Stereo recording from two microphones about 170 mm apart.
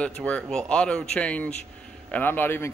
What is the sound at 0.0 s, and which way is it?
Speech, 5° left (ahead or behind).